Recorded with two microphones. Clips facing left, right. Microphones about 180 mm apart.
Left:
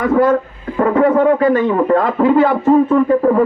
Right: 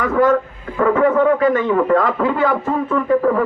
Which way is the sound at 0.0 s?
35° left (ahead or behind).